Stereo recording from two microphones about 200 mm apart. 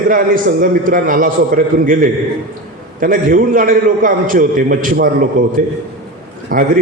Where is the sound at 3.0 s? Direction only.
45° right (ahead or behind).